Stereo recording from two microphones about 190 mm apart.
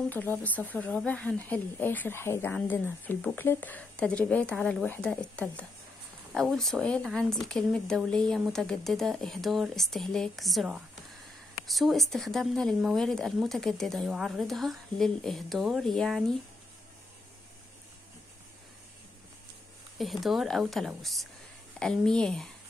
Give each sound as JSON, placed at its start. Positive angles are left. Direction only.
{"t": 0.1, "sound": "speech", "side_deg": 10}
{"t": 20.0, "sound": "speech", "side_deg": 0}